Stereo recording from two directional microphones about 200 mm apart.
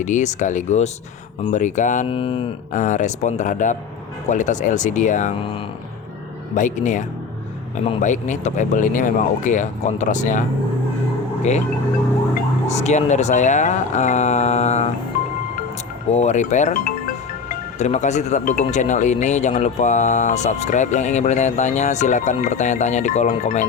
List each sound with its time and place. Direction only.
0.0 s speech: 35° left (ahead or behind)
2.7 s speech: 40° left (ahead or behind)
6.6 s speech: 40° left (ahead or behind)
12.6 s speech: 35° left (ahead or behind)
16.0 s speech: 35° left (ahead or behind)